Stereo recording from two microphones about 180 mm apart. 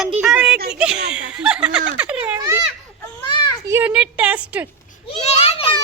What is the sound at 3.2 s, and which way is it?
Children playing, 25° left (ahead or behind).